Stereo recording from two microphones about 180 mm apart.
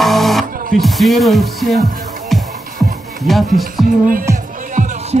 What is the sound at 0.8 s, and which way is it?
Speech, centre (ahead or behind).